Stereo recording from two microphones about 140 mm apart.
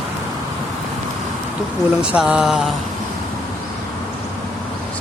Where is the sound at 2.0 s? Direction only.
5° right (ahead or behind).